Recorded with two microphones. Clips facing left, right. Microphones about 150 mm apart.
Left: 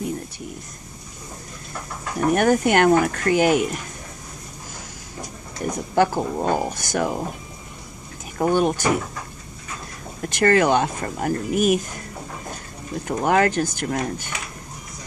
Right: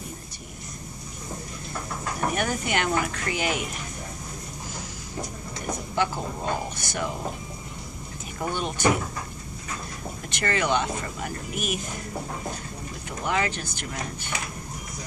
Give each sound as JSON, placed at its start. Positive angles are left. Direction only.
{"t": 2.3, "sound": "speech", "side_deg": 50}
{"t": 5.9, "sound": "speech", "side_deg": 50}
{"t": 8.4, "sound": "speech", "side_deg": 50}
{"t": 10.2, "sound": "speech", "side_deg": 50}
{"t": 13.1, "sound": "speech", "side_deg": 50}